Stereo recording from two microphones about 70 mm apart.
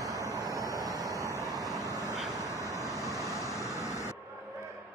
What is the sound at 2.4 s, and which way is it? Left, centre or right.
Vehicle, left.